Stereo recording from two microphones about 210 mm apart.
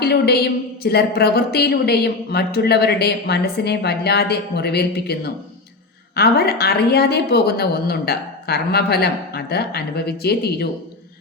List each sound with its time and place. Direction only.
0.0 s a woman's voice: 50° left (ahead or behind)